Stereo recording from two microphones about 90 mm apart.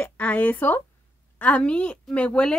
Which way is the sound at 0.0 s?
15° left (ahead or behind).